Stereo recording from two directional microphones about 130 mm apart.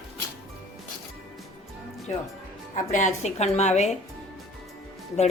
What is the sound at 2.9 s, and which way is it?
Speech, 65° left (ahead or behind).